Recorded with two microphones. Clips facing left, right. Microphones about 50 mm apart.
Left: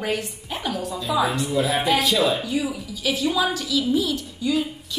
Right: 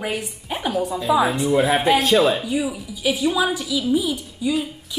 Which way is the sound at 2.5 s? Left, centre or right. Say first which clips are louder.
Right 2 dB; centre.